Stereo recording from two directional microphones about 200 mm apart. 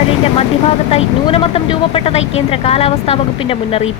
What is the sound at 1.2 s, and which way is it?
Speech, 25° left (ahead or behind).